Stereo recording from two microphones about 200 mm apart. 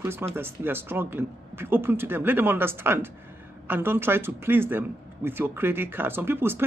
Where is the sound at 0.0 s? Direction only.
10° right (ahead or behind).